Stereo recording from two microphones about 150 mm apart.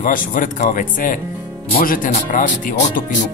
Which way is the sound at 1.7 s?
75° left (ahead or behind).